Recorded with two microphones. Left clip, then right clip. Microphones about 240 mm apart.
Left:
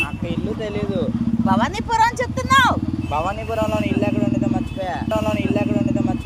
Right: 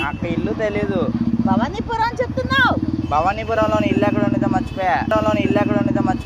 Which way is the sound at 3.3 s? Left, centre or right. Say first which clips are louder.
Right 4 dB; centre.